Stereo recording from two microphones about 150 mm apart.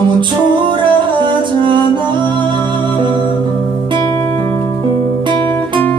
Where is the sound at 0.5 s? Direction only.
30° right (ahead or behind).